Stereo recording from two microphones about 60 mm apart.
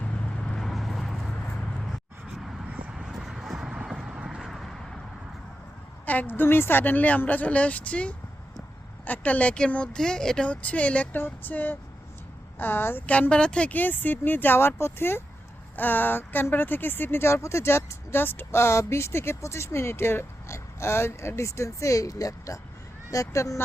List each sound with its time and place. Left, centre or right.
0.0 s vehicle: left
0.7 s vehicle: centre
2.9 s a sound: centre
4.4 s a sound: centre
6.1 s speech: left
13.1 s speech: left
13.7 s speech: left